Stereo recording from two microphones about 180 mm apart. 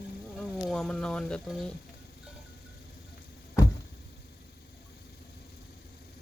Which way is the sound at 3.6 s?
15° left (ahead or behind).